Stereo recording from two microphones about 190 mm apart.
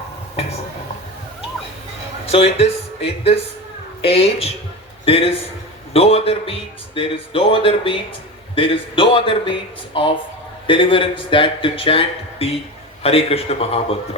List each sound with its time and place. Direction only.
2.2 s speech: 30° left (ahead or behind)
4.0 s a man's voice: 30° left (ahead or behind)